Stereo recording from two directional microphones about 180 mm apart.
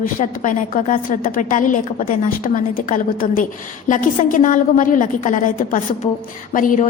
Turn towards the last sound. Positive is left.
turn(degrees=50)  # may be behind; listen again after turning